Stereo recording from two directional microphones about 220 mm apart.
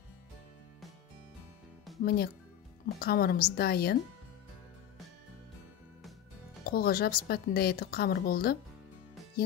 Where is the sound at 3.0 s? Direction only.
45° left (ahead or behind).